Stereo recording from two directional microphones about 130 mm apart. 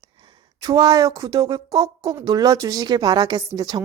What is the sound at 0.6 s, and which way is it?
A woman's voice, 30° right (ahead or behind).